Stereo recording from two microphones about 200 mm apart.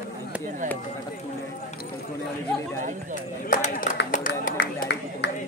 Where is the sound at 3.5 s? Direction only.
40° left (ahead or behind).